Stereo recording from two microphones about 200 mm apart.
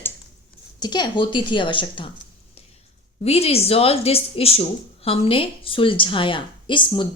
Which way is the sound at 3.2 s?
30° left (ahead or behind).